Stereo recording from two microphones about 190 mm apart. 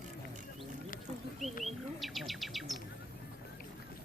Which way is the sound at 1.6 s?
Centre (ahead or behind).